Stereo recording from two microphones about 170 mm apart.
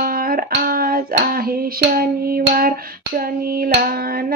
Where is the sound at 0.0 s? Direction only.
60° right (ahead or behind).